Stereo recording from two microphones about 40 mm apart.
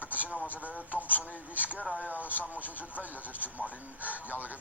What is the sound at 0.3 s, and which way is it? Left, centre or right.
Speech, left.